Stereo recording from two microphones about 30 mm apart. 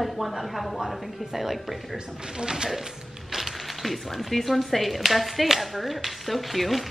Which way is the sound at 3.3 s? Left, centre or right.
Centre.